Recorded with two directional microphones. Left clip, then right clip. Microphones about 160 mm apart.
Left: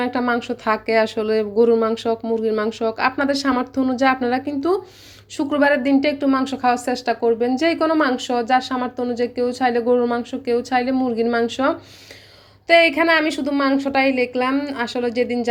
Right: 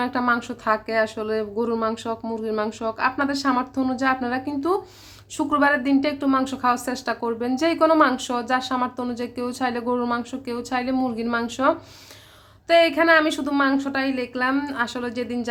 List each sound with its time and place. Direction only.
0.0 s a woman's voice: 15° left (ahead or behind)